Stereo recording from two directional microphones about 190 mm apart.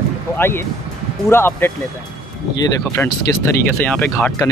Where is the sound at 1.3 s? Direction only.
10° left (ahead or behind).